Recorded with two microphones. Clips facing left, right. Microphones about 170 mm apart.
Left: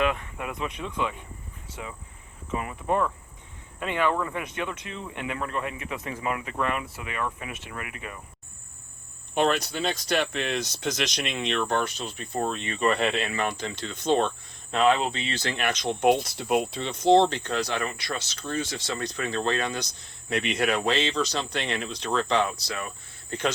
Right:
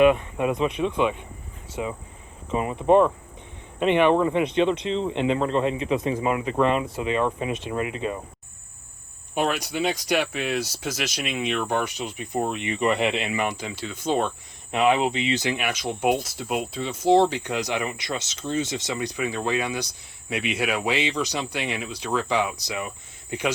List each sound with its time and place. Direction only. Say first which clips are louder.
0.0 s speech: right 9 dB; 20° right (ahead or behind)
9.3 s speech: left 1 dB; 10° right (ahead or behind)